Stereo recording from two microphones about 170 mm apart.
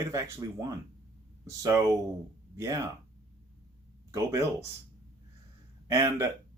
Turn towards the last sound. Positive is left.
turn(degrees=-20)  # may be behind; listen again after turning